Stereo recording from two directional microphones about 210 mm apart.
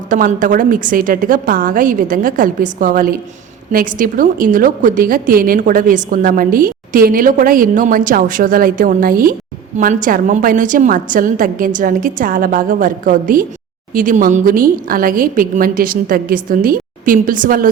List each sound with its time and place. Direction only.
0.1 s a woman's voice: 40° right (ahead or behind)